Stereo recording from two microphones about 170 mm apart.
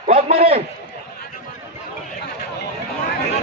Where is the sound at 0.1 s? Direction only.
35° right (ahead or behind).